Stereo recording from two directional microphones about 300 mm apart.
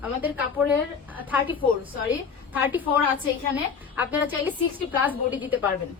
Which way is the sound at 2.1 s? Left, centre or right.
Centre.